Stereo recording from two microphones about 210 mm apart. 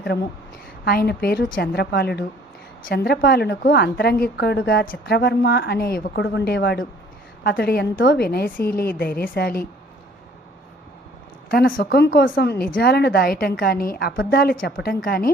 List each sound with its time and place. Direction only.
0.9 s a woman's voice: 45° left (ahead or behind)
11.5 s a woman's voice: 45° left (ahead or behind)